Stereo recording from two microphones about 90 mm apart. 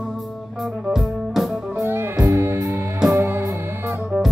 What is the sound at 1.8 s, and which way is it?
Music, 25° right (ahead or behind).